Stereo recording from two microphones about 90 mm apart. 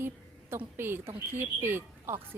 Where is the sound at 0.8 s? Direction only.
25° right (ahead or behind).